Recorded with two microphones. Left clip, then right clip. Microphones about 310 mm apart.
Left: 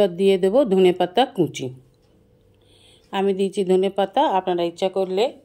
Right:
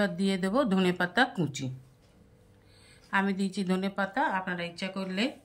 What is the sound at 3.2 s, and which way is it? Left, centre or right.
Speech, centre.